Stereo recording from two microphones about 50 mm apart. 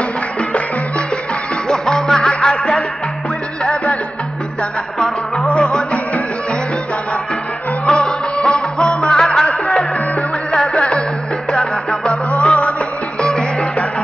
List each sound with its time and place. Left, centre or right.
1.7 s music: centre
4.9 s music: centre
7.8 s music: centre
12.3 s music: left